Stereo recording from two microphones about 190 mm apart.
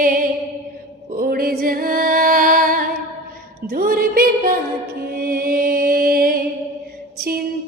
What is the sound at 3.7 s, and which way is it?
Music, 50° right (ahead or behind).